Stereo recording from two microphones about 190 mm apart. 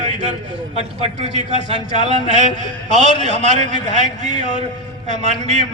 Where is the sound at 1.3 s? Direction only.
40° right (ahead or behind).